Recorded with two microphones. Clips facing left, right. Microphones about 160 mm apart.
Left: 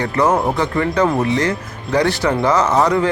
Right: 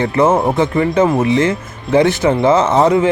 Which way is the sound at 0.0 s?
25° right (ahead or behind).